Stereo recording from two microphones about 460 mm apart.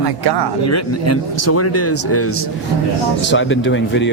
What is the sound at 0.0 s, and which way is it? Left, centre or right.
Speech, right.